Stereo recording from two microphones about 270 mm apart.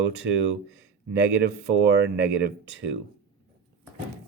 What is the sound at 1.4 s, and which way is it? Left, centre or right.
Speech, right.